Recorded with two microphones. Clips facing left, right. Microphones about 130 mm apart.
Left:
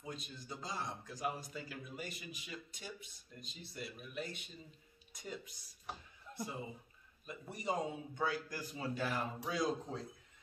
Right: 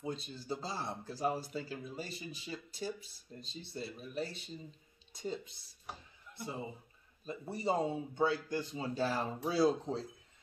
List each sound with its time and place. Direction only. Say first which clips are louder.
0.0 s speech: right 6 dB; 30° right (ahead or behind)